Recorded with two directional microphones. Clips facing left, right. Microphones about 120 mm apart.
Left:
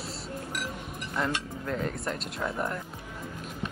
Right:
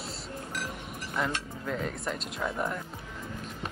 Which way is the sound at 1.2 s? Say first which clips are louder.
Left 1 dB; 5° right (ahead or behind).